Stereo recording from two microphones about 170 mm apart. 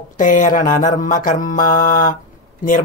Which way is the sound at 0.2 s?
50° left (ahead or behind).